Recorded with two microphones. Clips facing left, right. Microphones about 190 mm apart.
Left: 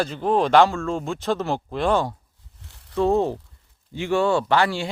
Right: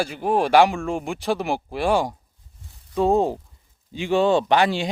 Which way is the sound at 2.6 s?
75° left (ahead or behind).